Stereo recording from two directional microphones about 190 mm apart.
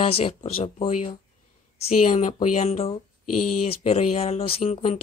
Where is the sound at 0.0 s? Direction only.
30° left (ahead or behind).